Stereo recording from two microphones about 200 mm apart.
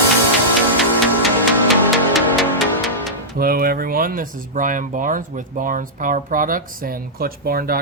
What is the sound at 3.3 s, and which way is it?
Speech, 45° right (ahead or behind).